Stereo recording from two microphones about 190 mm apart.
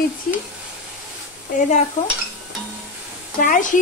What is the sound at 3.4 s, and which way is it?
Speech, 45° left (ahead or behind).